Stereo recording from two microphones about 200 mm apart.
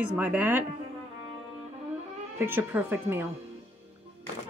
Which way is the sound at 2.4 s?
10° right (ahead or behind).